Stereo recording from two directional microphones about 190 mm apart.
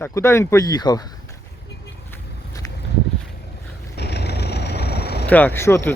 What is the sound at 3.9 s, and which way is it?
Vehicle, 60° left (ahead or behind).